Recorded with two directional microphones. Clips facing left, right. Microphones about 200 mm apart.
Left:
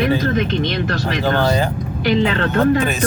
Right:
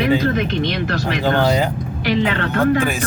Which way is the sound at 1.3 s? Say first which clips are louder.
Right 1 dB; 15° right (ahead or behind).